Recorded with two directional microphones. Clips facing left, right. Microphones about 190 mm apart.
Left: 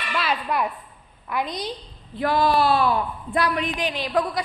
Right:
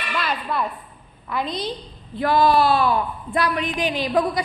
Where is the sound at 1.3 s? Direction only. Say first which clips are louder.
Right 2 dB; 15° left (ahead or behind).